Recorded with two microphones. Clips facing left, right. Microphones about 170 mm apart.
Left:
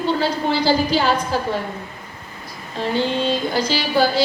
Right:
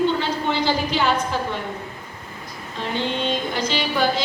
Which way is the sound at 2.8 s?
35° left (ahead or behind).